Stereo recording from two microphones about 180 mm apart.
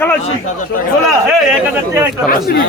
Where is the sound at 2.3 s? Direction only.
55° left (ahead or behind).